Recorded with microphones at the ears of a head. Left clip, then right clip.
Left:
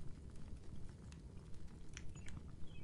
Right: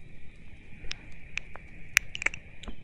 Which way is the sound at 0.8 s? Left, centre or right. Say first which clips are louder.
Right 19 dB; right.